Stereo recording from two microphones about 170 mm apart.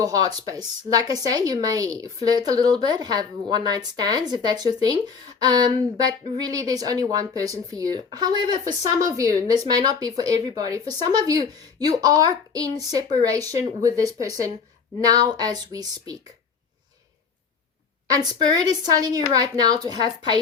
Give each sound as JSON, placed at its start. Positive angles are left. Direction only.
{"t": 0.0, "sound": "speech", "side_deg": -20}
{"t": 18.1, "sound": "speech", "side_deg": -25}